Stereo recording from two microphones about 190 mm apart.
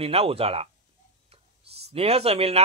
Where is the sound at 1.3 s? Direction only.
30° right (ahead or behind).